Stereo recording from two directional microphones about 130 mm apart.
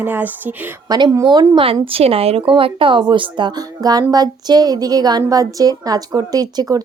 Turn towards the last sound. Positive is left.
turn(degrees=-30)  # may be behind; listen again after turning